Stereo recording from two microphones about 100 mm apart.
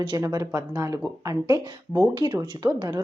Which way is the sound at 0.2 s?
35° right (ahead or behind).